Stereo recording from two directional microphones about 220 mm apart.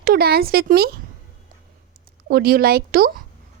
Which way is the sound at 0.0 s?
45° right (ahead or behind).